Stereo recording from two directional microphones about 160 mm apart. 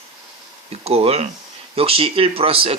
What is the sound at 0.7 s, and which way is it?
Speech, 40° right (ahead or behind).